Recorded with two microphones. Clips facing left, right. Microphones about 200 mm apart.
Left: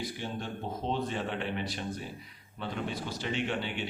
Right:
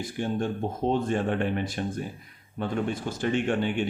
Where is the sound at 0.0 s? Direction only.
50° right (ahead or behind).